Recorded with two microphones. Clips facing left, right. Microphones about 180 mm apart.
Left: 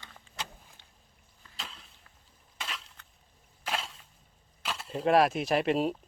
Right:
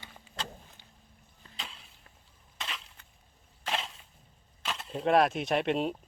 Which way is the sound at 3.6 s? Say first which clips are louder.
Right 1 dB; 5° left (ahead or behind).